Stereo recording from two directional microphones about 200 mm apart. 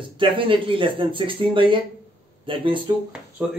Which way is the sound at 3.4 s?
10° right (ahead or behind).